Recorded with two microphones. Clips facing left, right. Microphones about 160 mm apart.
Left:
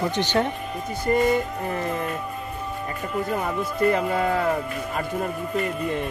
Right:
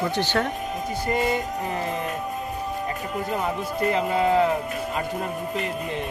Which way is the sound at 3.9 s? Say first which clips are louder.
Right 1 dB; 50° left (ahead or behind).